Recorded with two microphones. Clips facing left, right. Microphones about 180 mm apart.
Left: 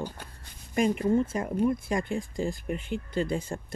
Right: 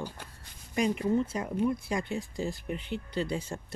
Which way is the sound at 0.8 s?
50° left (ahead or behind).